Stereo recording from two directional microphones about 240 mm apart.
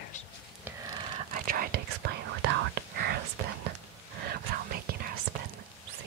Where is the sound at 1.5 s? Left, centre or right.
Right.